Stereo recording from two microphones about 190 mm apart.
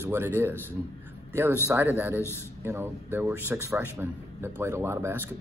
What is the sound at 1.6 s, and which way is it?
Speech, 10° right (ahead or behind).